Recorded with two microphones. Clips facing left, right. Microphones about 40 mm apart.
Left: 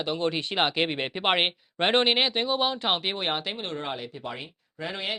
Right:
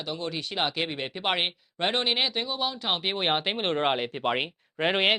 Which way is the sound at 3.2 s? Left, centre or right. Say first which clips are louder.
Right 3 dB; centre.